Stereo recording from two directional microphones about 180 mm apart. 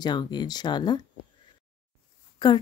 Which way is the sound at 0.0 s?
25° left (ahead or behind).